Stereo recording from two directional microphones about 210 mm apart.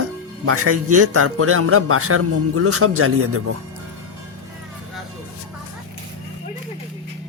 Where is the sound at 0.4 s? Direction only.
90° right.